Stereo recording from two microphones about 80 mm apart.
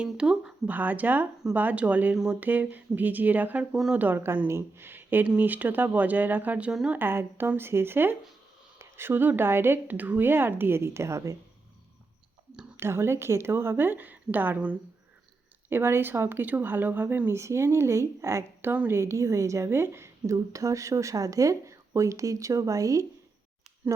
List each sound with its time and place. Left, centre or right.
0.0 s speech: centre
0.7 s speech: right
2.4 s speech: right
6.7 s speech: centre
6.9 s speech: right
12.7 s speech: right
15.7 s a woman's voice: right
23.8 s speech: right